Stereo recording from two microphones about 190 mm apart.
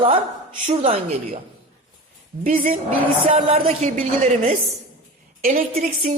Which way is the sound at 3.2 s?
30° right (ahead or behind).